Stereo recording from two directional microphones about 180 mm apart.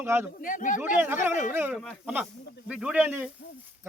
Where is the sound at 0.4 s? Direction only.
45° left (ahead or behind).